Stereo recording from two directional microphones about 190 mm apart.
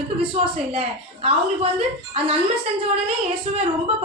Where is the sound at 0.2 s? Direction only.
30° right (ahead or behind).